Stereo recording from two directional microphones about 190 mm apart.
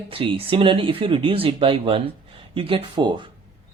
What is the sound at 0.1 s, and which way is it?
Speech, 30° right (ahead or behind).